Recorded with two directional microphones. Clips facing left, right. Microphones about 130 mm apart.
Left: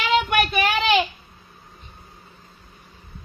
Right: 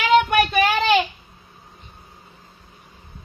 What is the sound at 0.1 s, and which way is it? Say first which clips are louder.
Child singing: right 4 dB; 40° right (ahead or behind).